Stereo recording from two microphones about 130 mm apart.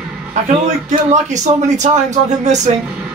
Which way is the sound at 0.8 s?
65° right (ahead or behind).